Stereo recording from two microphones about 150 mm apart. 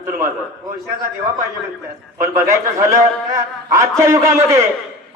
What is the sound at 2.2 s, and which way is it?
A man's voice, 20° right (ahead or behind).